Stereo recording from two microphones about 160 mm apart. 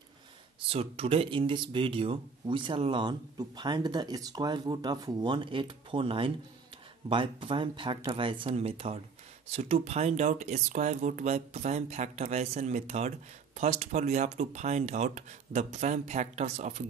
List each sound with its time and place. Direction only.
0.6 s speech: 40° right (ahead or behind)